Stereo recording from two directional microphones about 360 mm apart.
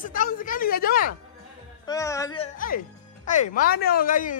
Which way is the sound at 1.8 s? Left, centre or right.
Centre.